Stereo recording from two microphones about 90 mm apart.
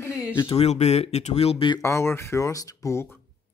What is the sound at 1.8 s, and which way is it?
Speech, 30° left (ahead or behind).